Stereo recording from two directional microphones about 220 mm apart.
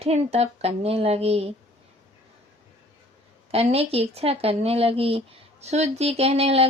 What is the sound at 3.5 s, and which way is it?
Speech, 25° right (ahead or behind).